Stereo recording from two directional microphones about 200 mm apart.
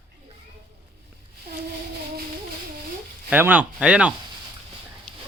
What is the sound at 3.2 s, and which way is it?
Speech, 10° right (ahead or behind).